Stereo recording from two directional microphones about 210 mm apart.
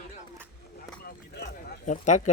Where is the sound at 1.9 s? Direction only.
35° left (ahead or behind).